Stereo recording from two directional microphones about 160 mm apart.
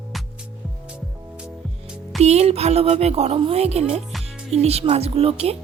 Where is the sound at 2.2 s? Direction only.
40° right (ahead or behind).